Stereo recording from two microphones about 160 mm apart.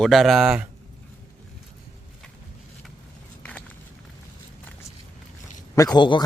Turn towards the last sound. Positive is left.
turn(degrees=25)  # may be behind; listen again after turning